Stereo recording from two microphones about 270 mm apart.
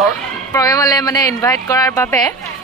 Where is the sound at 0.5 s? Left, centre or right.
Centre.